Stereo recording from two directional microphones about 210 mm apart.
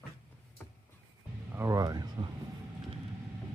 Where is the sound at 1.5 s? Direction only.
15° right (ahead or behind).